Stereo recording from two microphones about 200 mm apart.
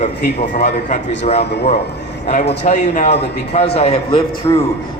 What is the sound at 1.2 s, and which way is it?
A man's voice, 30° left (ahead or behind).